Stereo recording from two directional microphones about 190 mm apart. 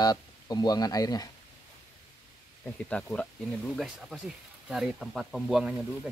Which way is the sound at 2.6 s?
5° left (ahead or behind).